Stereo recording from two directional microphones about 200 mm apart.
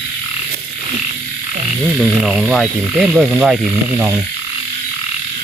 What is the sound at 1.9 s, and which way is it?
Speech, centre (ahead or behind).